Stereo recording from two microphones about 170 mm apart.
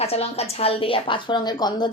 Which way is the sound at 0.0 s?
35° left (ahead or behind).